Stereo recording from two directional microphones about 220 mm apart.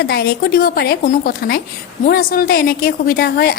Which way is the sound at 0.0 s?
45° left (ahead or behind).